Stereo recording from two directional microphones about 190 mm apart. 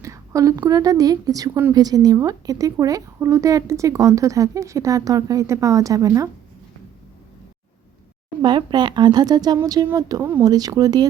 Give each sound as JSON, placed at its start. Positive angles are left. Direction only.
{"t": 0.0, "sound": "a woman's voice", "side_deg": -15}
{"t": 8.4, "sound": "speech", "side_deg": -25}